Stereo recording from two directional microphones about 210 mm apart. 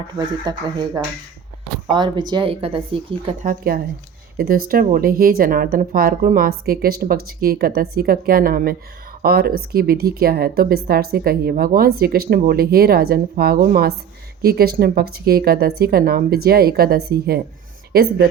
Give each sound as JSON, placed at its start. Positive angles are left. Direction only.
{"t": 0.4, "sound": "speech", "side_deg": -20}
{"t": 3.4, "sound": "a woman's voice", "side_deg": -45}